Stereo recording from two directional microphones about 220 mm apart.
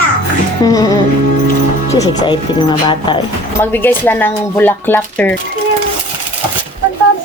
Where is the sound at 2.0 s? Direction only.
20° left (ahead or behind).